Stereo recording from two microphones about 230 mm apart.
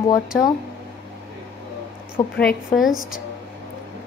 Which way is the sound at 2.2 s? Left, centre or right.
Left.